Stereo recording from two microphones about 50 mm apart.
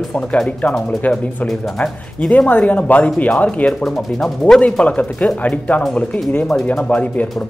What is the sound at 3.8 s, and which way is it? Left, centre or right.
Speech, centre.